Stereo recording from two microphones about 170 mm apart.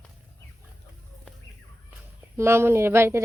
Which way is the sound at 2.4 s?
15° right (ahead or behind).